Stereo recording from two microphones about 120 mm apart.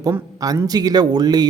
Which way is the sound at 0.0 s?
30° right (ahead or behind).